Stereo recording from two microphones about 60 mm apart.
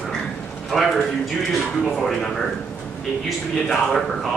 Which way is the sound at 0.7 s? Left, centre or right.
Centre.